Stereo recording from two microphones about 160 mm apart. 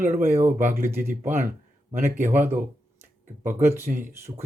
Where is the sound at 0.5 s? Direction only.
55° right (ahead or behind).